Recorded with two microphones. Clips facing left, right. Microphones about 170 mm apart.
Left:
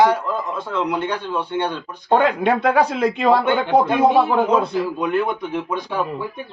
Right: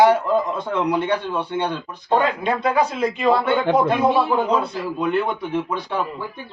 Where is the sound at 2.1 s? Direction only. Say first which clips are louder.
Left 3 dB; 60° left (ahead or behind).